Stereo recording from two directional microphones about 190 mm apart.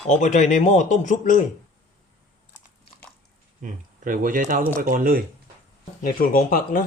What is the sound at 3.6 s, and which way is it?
Speech, 45° right (ahead or behind).